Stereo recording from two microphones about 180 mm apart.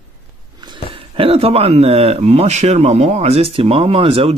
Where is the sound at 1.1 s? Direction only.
30° right (ahead or behind).